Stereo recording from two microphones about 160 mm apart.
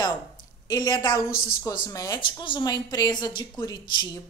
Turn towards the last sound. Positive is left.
turn(degrees=25)  # may be behind; listen again after turning